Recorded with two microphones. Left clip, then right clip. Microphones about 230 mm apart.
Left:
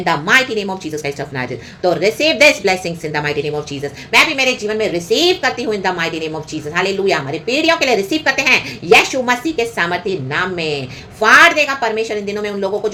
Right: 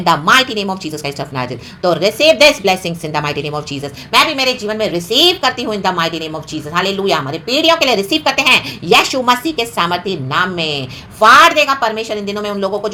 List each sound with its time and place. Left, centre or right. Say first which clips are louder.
0.0 s a woman's voice: right 3 dB; right